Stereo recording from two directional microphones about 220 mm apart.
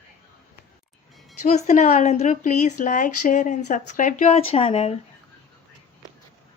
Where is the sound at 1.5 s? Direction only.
35° left (ahead or behind).